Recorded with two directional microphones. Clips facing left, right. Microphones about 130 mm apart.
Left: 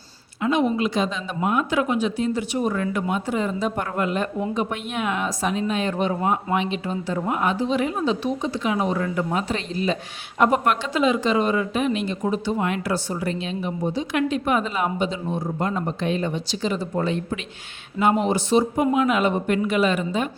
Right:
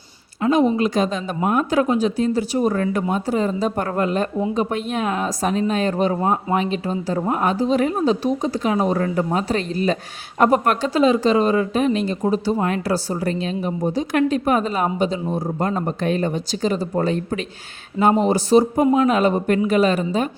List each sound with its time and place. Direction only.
0.4 s speech: 35° right (ahead or behind)